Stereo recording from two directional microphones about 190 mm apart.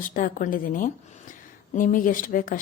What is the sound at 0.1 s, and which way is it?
A woman's voice, 45° left (ahead or behind).